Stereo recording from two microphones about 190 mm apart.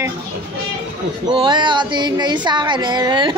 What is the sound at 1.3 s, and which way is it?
Speech, 25° right (ahead or behind).